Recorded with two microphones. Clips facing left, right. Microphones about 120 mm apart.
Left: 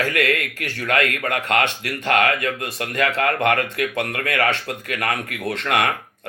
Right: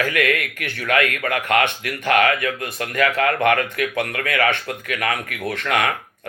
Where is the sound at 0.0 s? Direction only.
35° left (ahead or behind).